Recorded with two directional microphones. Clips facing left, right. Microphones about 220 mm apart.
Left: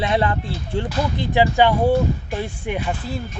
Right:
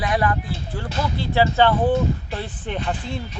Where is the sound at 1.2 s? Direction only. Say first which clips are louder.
Left 1 dB; 15° left (ahead or behind).